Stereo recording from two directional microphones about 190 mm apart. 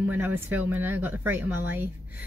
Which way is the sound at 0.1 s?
10° right (ahead or behind).